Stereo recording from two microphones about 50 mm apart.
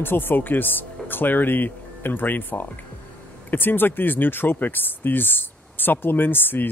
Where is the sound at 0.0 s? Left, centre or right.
Left.